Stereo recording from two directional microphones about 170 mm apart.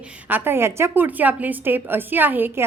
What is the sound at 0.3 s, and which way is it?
A woman's voice, 10° right (ahead or behind).